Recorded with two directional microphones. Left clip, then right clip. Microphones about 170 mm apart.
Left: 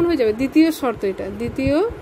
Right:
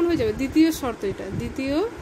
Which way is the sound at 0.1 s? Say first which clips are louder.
Left 5 dB; 35° left (ahead or behind).